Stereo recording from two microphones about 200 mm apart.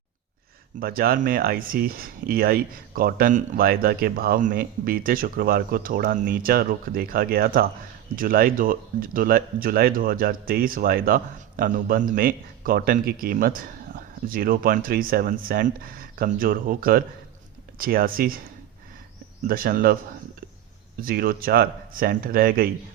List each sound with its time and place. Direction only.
0.8 s speech: 45° right (ahead or behind)
19.5 s speech: 45° right (ahead or behind)
21.0 s speech: 45° right (ahead or behind)